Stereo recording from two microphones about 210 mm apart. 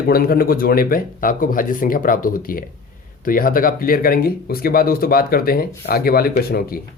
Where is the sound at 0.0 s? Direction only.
45° left (ahead or behind).